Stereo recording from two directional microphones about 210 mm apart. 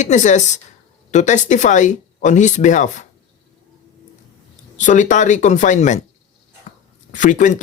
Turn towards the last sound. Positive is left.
turn(degrees=35)  # may be behind; listen again after turning